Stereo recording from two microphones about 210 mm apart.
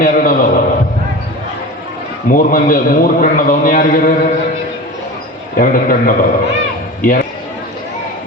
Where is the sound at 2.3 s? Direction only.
40° left (ahead or behind).